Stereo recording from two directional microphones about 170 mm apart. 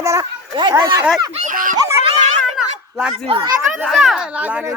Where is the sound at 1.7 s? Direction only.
25° right (ahead or behind).